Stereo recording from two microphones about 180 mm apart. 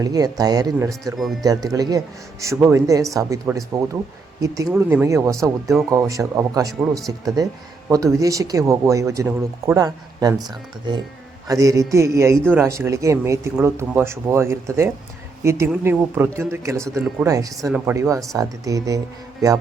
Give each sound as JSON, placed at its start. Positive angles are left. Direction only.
{"t": 0.0, "sound": "speech", "side_deg": -20}
{"t": 1.1, "sound": "speech", "side_deg": 0}
{"t": 1.5, "sound": "speech", "side_deg": -20}
{"t": 11.4, "sound": "speech", "side_deg": -20}
{"t": 17.7, "sound": "speech", "side_deg": -5}
{"t": 17.9, "sound": "speech", "side_deg": -15}